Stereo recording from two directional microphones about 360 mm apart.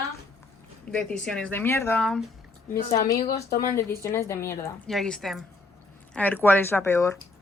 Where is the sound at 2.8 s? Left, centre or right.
Left.